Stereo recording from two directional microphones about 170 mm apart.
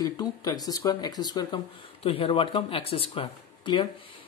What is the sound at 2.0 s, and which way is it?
Speech, 35° left (ahead or behind).